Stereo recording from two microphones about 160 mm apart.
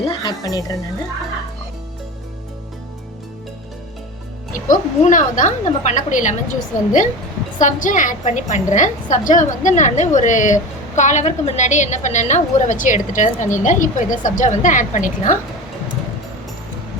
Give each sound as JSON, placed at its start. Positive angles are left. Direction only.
{"t": 0.1, "sound": "speech", "side_deg": 25}
{"t": 4.5, "sound": "a woman's voice", "side_deg": 55}